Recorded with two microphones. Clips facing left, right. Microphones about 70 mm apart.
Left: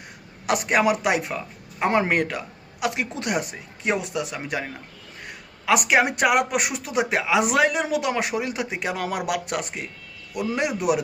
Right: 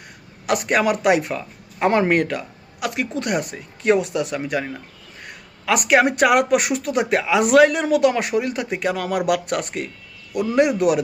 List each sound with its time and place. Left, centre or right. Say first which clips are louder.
0.4 s a man's voice: right 1 dB; centre
1.0 s speech: right 5 dB; centre
2.8 s speech: right 2 dB; left; by 4.4 s centre
5.6 s speech: right 3 dB; centre